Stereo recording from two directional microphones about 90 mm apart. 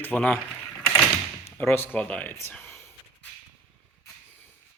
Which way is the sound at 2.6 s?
25° left (ahead or behind).